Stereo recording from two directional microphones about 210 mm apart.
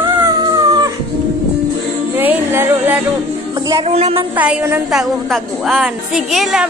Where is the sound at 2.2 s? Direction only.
10° right (ahead or behind).